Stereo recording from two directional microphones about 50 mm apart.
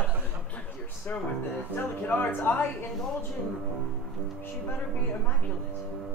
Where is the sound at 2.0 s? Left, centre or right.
Left.